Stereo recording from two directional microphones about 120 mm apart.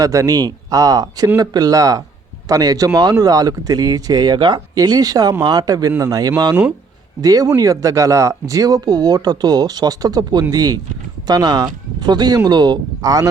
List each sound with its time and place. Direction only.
0.0 s speech: 30° right (ahead or behind)